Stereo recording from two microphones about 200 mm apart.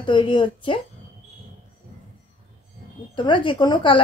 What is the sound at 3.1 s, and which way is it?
Speech, 25° left (ahead or behind).